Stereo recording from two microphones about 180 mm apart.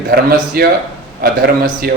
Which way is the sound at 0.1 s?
60° right (ahead or behind).